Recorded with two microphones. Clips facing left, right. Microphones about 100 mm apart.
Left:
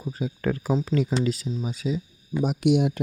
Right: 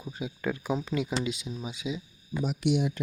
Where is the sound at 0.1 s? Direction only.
40° left (ahead or behind).